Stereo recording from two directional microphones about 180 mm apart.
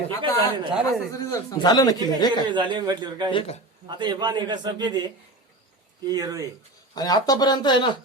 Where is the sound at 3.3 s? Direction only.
30° left (ahead or behind).